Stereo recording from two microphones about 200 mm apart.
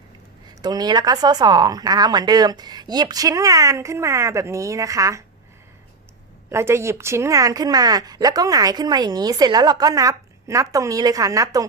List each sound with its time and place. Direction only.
0.6 s speech: 20° right (ahead or behind)
6.5 s a woman's voice: 15° right (ahead or behind)